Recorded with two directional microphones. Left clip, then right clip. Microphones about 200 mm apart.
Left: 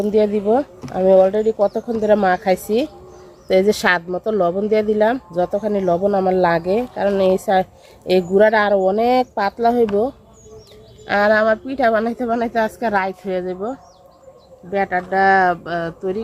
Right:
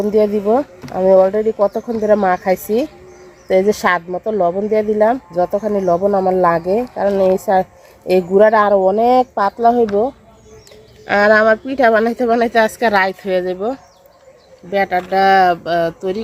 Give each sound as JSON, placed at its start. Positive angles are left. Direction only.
{"t": 0.0, "sound": "speech", "side_deg": -25}
{"t": 3.5, "sound": "speech", "side_deg": -10}
{"t": 11.0, "sound": "a woman's voice", "side_deg": -35}
{"t": 14.7, "sound": "speech", "side_deg": -60}